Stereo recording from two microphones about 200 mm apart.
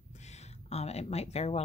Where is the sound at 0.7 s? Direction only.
30° left (ahead or behind).